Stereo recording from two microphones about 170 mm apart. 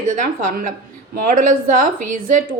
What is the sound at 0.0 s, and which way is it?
A woman's voice, 50° right (ahead or behind).